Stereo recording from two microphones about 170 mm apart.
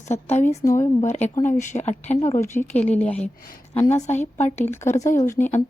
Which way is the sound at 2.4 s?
10° left (ahead or behind).